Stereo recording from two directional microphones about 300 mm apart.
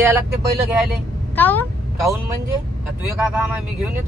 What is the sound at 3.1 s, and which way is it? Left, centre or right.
Speech, centre.